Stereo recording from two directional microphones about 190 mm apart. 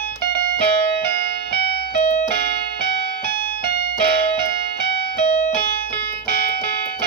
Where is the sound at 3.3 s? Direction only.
55° left (ahead or behind).